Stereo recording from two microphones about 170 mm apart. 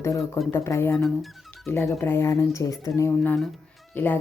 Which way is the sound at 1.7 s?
15° left (ahead or behind).